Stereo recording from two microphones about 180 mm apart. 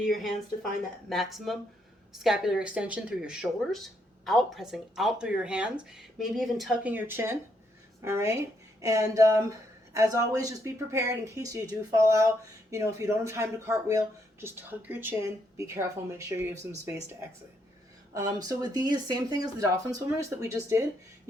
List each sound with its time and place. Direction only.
0.0 s speech: centre (ahead or behind); by 20.8 s 15° right (ahead or behind)